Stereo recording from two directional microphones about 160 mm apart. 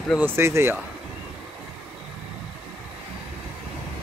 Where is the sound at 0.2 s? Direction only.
15° right (ahead or behind).